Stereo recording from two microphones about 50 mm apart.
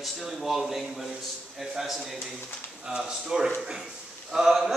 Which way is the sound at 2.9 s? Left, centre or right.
Right.